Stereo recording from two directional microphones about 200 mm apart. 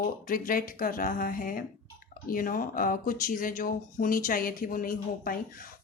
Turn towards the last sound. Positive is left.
turn(degrees=45)  # may be behind; listen again after turning